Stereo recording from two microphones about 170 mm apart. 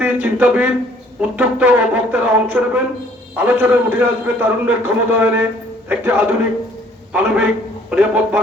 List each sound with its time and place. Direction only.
0.0 s a man's voice: 10° right (ahead or behind)